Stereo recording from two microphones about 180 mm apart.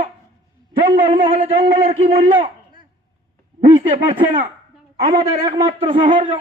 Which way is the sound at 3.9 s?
50° right (ahead or behind).